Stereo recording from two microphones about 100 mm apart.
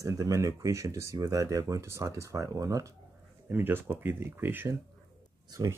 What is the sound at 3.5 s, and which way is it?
Speech, 20° right (ahead or behind).